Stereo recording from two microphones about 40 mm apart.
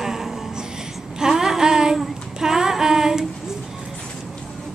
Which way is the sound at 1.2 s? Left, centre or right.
Centre.